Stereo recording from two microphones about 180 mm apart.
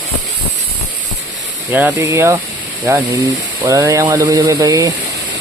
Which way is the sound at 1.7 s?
15° right (ahead or behind).